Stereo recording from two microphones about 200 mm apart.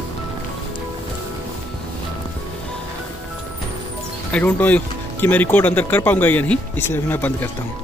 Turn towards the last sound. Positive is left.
turn(degrees=10)  # may be behind; listen again after turning